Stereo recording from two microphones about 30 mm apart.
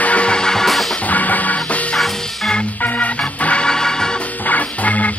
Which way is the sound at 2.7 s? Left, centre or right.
Left.